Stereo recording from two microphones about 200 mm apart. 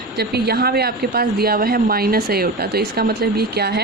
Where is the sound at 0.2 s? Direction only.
55° right (ahead or behind).